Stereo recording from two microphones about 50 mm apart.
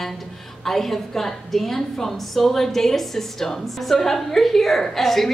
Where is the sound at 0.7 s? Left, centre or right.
Centre.